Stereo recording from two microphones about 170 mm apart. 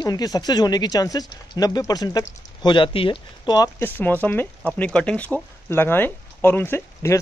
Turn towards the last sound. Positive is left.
turn(degrees=15)  # may be behind; listen again after turning